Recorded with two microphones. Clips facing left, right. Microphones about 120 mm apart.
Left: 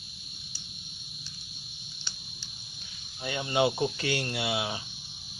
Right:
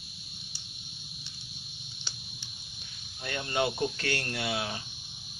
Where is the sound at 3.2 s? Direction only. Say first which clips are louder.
Left 4 dB; 10° left (ahead or behind).